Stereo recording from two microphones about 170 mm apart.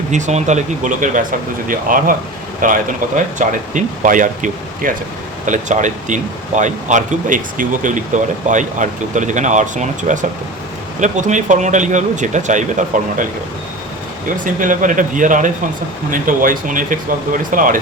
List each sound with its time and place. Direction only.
0.1 s speech: 45° right (ahead or behind)
14.3 s speech: 50° right (ahead or behind)